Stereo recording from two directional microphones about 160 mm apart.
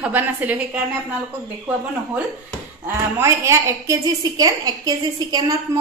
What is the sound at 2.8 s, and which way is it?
A woman's voice, 15° right (ahead or behind).